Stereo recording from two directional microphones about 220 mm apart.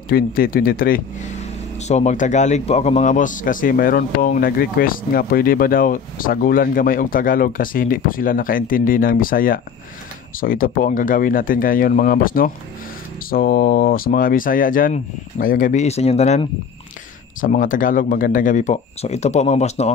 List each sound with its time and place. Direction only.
0.1 s speech: 40° left (ahead or behind)